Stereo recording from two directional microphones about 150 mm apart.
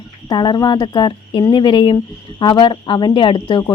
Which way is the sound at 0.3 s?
30° left (ahead or behind).